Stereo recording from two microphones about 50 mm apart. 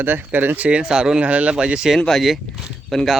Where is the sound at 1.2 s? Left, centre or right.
Right.